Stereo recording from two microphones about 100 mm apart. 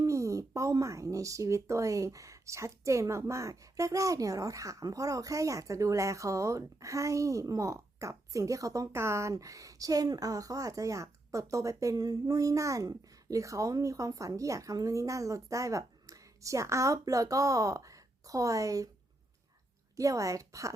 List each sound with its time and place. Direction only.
0.0 s speech: 30° right (ahead or behind)
20.0 s speech: 35° right (ahead or behind)